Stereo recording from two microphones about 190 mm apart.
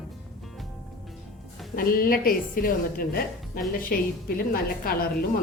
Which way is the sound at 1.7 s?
50° left (ahead or behind).